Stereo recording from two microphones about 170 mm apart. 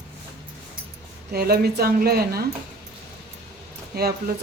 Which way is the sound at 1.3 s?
65° right (ahead or behind).